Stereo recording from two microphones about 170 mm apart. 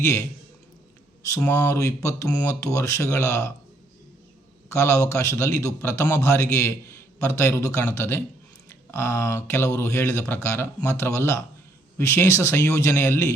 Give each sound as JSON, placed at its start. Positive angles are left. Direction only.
{"t": 0.0, "sound": "a man's voice", "side_deg": 15}
{"t": 1.3, "sound": "a man's voice", "side_deg": 10}
{"t": 4.7, "sound": "a man's voice", "side_deg": 15}